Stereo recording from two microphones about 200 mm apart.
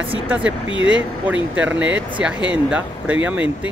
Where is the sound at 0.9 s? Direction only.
5° right (ahead or behind).